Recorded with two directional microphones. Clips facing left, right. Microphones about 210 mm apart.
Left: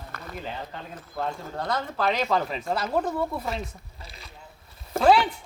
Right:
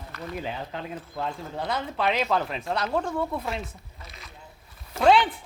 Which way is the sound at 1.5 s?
5° right (ahead or behind).